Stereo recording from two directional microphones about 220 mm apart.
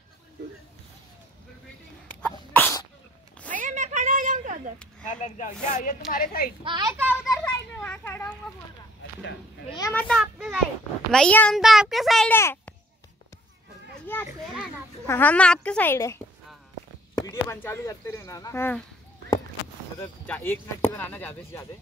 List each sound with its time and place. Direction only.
2.2 s sneeze: 10° left (ahead or behind)
3.5 s a sound: 35° right (ahead or behind)
5.0 s speech: 35° left (ahead or behind)
6.6 s a woman's voice: 20° right (ahead or behind)
7.2 s children playing: 10° left (ahead or behind)
9.7 s speech: 15° left (ahead or behind)
10.0 s a sound: centre (ahead or behind)
11.1 s a child's voice: 5° left (ahead or behind)
15.0 s speech: 10° left (ahead or behind)
17.3 s speech: 10° left (ahead or behind)
20.2 s speech: 10° left (ahead or behind)